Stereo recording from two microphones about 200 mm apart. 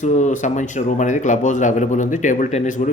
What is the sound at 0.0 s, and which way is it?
Speech, 40° left (ahead or behind).